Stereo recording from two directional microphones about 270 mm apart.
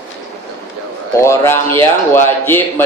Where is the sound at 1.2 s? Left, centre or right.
Centre.